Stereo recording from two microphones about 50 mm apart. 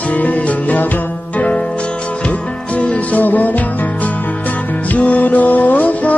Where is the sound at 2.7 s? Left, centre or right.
Left.